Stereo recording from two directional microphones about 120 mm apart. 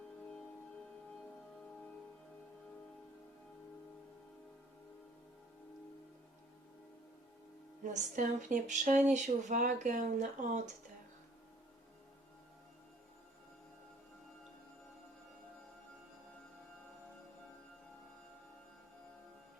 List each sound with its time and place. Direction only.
8.1 s speech: 90° right